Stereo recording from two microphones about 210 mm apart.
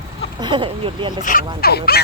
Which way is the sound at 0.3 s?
20° right (ahead or behind).